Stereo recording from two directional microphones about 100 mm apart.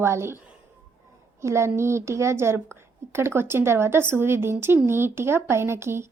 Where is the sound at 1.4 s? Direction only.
30° right (ahead or behind).